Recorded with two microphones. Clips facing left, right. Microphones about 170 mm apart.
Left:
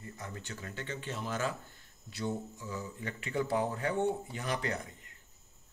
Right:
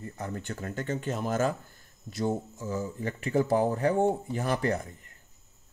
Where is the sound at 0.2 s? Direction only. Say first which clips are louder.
Right 9 dB; 55° right (ahead or behind).